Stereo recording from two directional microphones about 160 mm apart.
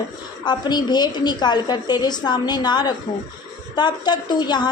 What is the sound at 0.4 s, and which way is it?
A woman's voice, 25° left (ahead or behind).